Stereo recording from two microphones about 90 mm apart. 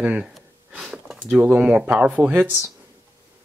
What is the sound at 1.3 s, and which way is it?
Speech, 15° right (ahead or behind).